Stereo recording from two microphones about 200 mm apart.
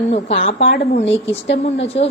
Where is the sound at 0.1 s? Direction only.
30° left (ahead or behind).